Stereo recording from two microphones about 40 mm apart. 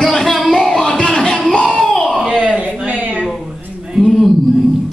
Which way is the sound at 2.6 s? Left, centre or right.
Right.